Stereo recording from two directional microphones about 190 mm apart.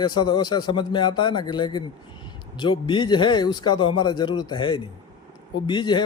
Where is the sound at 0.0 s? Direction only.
25° left (ahead or behind).